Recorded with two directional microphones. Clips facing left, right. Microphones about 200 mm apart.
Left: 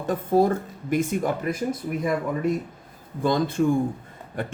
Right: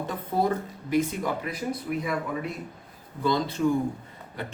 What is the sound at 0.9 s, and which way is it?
Speech, 50° left (ahead or behind).